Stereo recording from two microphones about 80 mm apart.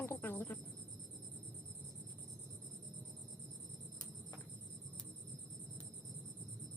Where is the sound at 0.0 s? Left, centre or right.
Left.